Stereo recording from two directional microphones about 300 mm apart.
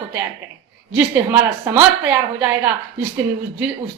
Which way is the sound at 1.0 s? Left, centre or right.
Centre.